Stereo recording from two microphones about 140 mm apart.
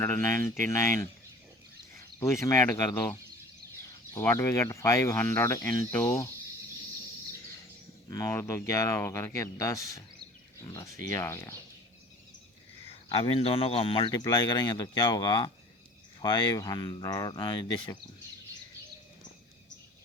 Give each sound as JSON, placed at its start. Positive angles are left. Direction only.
{"t": 0.0, "sound": "speech", "side_deg": 15}
{"t": 2.1, "sound": "speech", "side_deg": 20}
{"t": 8.1, "sound": "speech", "side_deg": 20}
{"t": 13.1, "sound": "speech", "side_deg": 40}